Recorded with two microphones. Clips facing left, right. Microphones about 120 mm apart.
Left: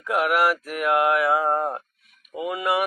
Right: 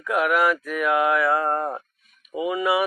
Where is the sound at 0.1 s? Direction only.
10° left (ahead or behind).